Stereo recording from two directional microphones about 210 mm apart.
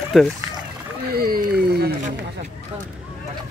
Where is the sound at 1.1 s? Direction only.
45° right (ahead or behind).